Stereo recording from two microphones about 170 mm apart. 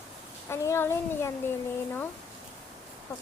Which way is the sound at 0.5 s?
15° left (ahead or behind).